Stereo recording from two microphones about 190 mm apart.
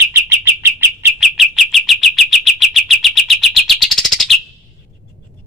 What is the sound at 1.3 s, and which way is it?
Bird, centre (ahead or behind).